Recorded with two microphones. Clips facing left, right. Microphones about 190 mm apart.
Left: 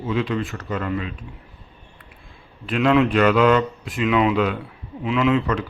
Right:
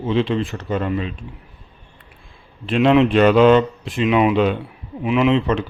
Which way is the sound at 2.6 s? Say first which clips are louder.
Right 3 dB; 25° right (ahead or behind).